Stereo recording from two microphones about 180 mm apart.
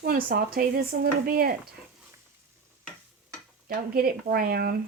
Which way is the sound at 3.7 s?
55° right (ahead or behind).